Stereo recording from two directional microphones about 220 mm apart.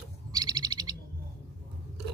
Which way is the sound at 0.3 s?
15° right (ahead or behind).